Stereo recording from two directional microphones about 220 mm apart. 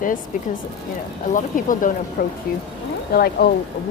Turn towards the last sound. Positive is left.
turn(degrees=45)  # may be behind; listen again after turning